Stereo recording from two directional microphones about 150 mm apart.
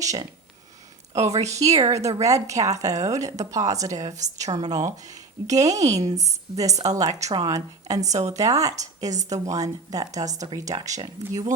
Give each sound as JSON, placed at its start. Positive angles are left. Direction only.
{"t": 0.0, "sound": "speech", "side_deg": -20}